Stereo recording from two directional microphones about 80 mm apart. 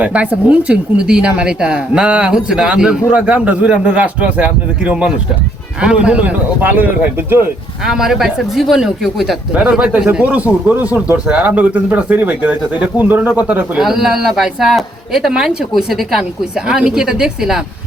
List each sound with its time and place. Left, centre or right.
0.0 s speech: centre
7.9 s speech: centre
13.7 s speech: centre